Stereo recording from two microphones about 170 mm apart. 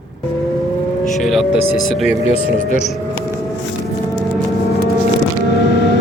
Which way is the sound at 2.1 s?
40° left (ahead or behind).